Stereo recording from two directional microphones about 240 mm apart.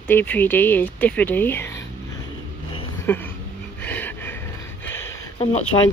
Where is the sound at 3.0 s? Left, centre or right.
Centre.